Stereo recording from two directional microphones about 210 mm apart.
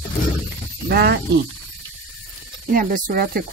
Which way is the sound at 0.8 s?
50° right (ahead or behind).